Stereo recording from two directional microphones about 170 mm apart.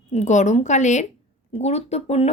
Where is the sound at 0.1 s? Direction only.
45° left (ahead or behind).